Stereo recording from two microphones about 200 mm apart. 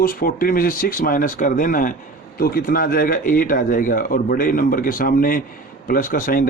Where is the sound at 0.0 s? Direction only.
45° left (ahead or behind).